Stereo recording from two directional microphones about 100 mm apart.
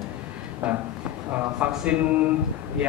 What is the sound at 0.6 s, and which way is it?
A man's voice, 10° right (ahead or behind).